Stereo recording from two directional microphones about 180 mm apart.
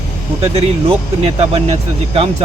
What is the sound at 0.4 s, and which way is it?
Speech, 35° right (ahead or behind).